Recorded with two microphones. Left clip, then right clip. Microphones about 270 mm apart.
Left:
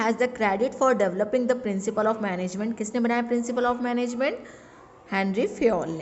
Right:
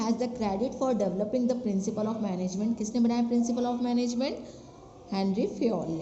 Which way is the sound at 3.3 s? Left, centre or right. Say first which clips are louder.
Left 5 dB; left.